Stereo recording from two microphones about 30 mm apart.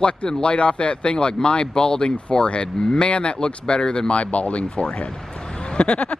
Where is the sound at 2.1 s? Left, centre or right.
Left.